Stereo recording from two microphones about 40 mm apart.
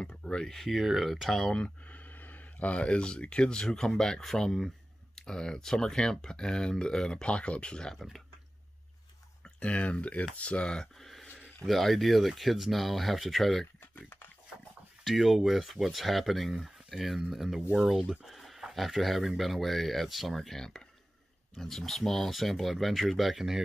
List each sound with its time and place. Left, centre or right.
0.2 s a sound: left
0.7 s speech: centre
1.3 s speech: centre
1.6 s speech: left
9.6 s speech: left
11.0 s a sound: centre
11.6 s speech: centre
15.0 s speech: centre